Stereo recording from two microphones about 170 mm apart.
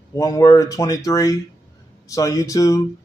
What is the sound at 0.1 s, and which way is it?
A man's voice, 20° left (ahead or behind).